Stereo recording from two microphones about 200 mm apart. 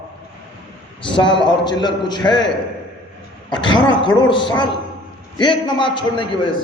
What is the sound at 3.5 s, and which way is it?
A man's voice, 25° left (ahead or behind).